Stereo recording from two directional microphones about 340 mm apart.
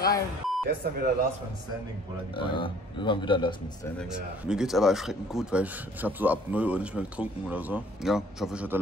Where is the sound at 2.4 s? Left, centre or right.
Centre.